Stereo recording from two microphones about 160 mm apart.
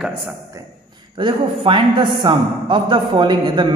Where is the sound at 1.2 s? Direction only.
30° right (ahead or behind).